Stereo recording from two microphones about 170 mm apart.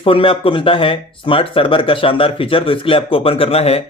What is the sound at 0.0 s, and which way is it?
Speech, 30° left (ahead or behind).